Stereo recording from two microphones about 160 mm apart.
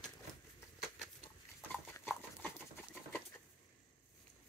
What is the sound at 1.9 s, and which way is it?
Clip-clop, 10° left (ahead or behind).